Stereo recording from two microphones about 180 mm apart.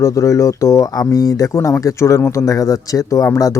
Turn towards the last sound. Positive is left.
turn(degrees=15)  # may be behind; listen again after turning